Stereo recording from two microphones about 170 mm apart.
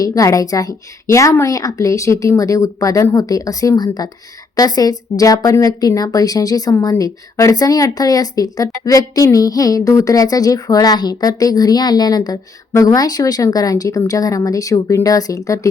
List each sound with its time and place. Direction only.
0.0 s speech: 20° left (ahead or behind)